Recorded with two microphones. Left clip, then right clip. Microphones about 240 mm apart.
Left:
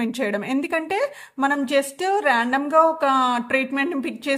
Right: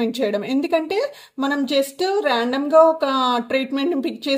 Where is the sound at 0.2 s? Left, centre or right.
Left.